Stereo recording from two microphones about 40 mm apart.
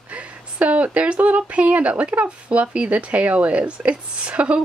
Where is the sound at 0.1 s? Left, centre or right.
Right.